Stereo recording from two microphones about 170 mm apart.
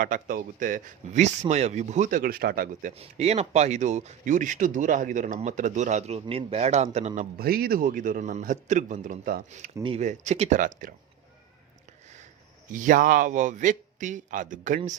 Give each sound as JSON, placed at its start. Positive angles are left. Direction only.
{"t": 0.0, "sound": "speech", "side_deg": -55}
{"t": 2.9, "sound": "speech", "side_deg": -35}
{"t": 7.3, "sound": "speech", "side_deg": -65}
{"t": 9.8, "sound": "speech", "side_deg": -40}
{"t": 12.7, "sound": "speech", "side_deg": -50}